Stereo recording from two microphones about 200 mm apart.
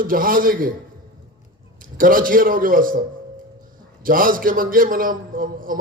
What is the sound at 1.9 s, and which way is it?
A man's voice, 45° right (ahead or behind).